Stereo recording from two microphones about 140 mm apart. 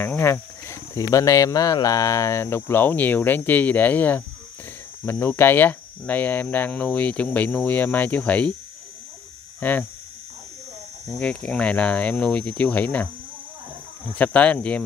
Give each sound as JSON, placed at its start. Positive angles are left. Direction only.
{"t": 0.0, "sound": "speech", "side_deg": 15}
{"t": 5.2, "sound": "speech", "side_deg": 15}
{"t": 9.6, "sound": "mains hum", "side_deg": 15}
{"t": 11.1, "sound": "speech", "side_deg": 10}
{"t": 14.1, "sound": "speech", "side_deg": 10}